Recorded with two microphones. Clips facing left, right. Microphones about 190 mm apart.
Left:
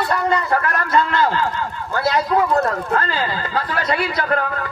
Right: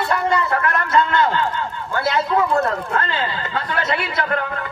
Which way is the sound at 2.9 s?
25° right (ahead or behind).